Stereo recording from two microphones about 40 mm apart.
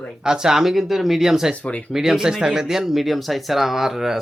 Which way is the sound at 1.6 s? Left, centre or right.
Left.